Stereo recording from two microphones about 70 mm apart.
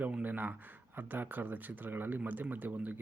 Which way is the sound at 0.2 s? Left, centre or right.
Right.